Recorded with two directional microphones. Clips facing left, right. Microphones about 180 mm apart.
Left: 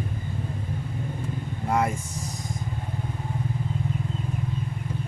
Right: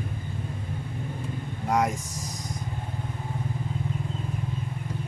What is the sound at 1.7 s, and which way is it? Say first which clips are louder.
Speech: even; 5° left (ahead or behind).